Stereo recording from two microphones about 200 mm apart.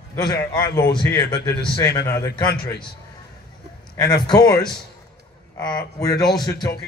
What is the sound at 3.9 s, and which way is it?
Speech, 20° left (ahead or behind).